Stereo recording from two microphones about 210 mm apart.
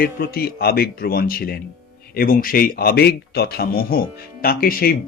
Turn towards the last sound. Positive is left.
turn(degrees=45)  # may be behind; listen again after turning